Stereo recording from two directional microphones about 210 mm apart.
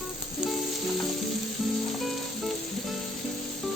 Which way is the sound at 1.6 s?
Centre (ahead or behind).